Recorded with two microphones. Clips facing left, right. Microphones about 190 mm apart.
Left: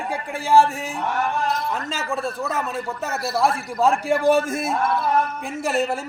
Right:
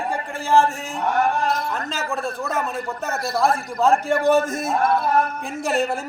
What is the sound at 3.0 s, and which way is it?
A man's voice, 5° left (ahead or behind).